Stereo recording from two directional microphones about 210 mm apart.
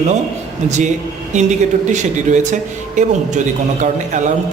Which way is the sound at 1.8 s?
35° right (ahead or behind).